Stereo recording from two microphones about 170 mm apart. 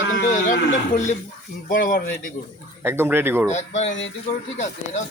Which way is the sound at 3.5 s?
45° left (ahead or behind).